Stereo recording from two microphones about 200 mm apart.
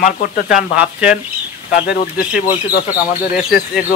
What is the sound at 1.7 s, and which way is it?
Speech, 45° left (ahead or behind).